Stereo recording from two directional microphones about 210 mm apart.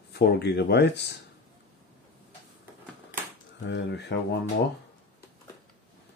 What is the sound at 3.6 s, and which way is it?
Speech, 55° left (ahead or behind).